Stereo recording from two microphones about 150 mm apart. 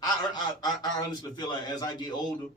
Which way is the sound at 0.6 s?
30° left (ahead or behind).